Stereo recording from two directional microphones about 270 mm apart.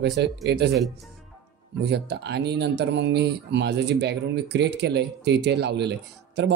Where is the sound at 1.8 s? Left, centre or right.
Right.